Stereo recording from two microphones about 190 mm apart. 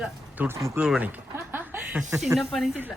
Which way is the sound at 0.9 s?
5° right (ahead or behind).